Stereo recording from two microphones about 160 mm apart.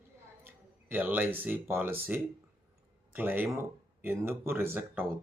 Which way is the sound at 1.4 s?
10° right (ahead or behind).